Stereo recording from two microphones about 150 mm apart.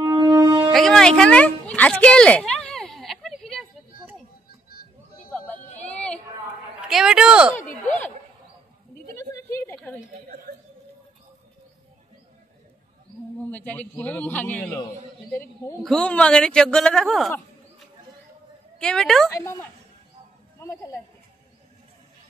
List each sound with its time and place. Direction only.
0.0 s wind instrument: 25° right (ahead or behind)
0.7 s a sound: centre (ahead or behind)
5.8 s a sound: 10° left (ahead or behind)
6.9 s a woman's voice: 5° right (ahead or behind)
9.3 s a sound: 20° left (ahead or behind)
13.4 s a man's voice: 10° left (ahead or behind)
15.8 s a woman's voice: 5° left (ahead or behind)
18.8 s a woman's voice: 5° left (ahead or behind)
19.3 s a man's voice: 20° left (ahead or behind)